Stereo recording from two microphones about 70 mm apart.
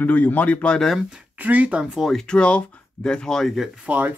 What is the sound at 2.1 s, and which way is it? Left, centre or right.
Speech, centre.